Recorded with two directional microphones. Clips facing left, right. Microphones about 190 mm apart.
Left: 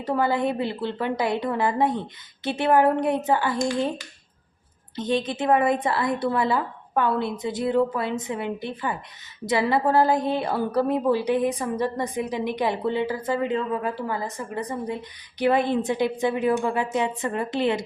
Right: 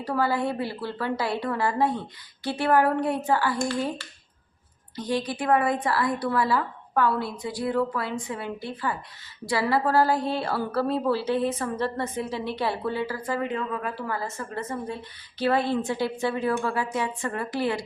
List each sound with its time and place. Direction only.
0.0 s a woman's voice: 20° left (ahead or behind)